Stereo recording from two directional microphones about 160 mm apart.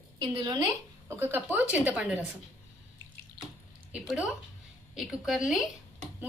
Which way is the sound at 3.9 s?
5° right (ahead or behind).